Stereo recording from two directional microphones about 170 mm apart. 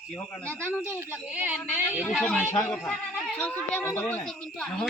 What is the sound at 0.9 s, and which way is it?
Speech, 10° right (ahead or behind).